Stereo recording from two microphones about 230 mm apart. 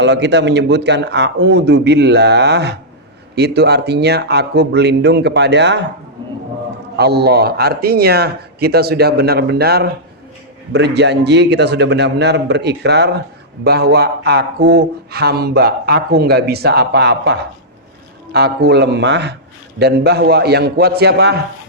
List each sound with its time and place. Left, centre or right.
0.0 s speech: right
6.9 s speech: right